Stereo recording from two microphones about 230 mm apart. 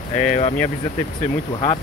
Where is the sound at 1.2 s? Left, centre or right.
Left.